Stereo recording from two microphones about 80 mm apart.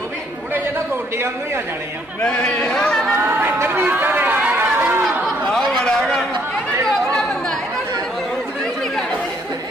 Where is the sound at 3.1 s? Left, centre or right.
Right.